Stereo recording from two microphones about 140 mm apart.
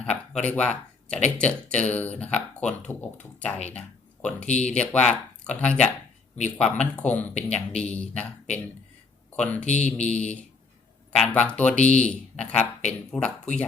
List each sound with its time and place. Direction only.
0.0 s speech: 5° left (ahead or behind)
9.6 s speech: 55° left (ahead or behind)
11.2 s speech: 10° left (ahead or behind)